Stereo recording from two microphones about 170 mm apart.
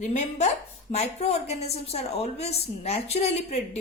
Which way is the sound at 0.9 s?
40° left (ahead or behind).